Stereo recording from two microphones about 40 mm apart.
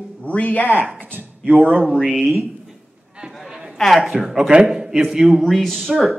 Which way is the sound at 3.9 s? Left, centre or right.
Centre.